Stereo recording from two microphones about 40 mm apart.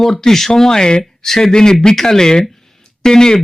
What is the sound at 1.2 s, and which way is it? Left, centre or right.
Speech, centre.